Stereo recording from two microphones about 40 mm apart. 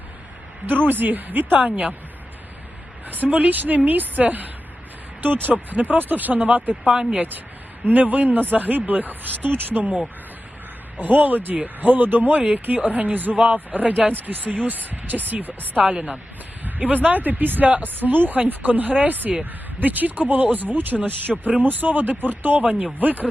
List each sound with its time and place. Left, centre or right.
0.9 s speech: right
1.5 s speech: right
3.1 s speech: right
7.9 s speech: right
10.9 s speech: right
15.8 s a woman's voice: right
16.6 s speech: right
22.6 s speech: right